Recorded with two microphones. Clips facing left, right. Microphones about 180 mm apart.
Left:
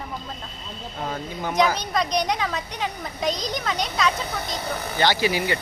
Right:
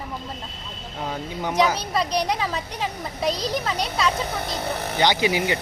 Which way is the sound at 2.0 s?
30° right (ahead or behind).